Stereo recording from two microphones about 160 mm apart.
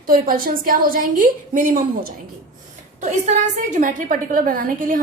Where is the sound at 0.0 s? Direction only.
60° right (ahead or behind).